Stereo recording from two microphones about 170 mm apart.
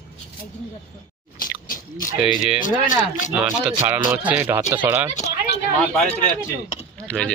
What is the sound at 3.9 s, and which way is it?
Speech, 10° right (ahead or behind).